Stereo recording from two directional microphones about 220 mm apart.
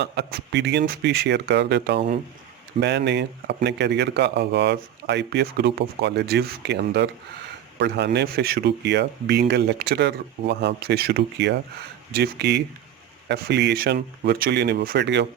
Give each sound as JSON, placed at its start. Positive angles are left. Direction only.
{"t": 0.0, "sound": "speech", "side_deg": -45}